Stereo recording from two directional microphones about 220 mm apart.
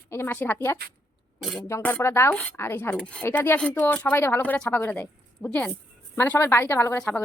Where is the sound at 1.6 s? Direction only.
10° left (ahead or behind).